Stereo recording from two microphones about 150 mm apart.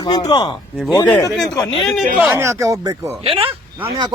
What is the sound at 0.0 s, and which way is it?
Speech, 25° left (ahead or behind).